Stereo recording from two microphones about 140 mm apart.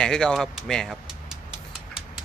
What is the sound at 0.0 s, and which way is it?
Speech, 5° left (ahead or behind).